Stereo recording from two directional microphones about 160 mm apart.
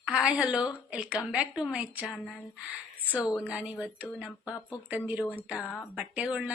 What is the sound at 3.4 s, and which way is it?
Speech, 10° right (ahead or behind).